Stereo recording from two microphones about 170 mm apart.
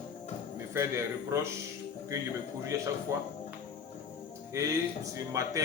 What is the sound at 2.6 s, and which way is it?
Speech, 20° right (ahead or behind).